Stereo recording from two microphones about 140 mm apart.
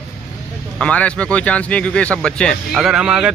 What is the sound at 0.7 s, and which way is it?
Speech, 10° left (ahead or behind).